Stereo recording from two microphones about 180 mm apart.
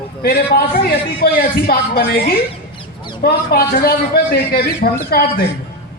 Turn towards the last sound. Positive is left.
turn(degrees=55)  # may be behind; listen again after turning